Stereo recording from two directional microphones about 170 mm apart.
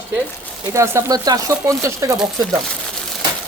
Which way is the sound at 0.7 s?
15° right (ahead or behind).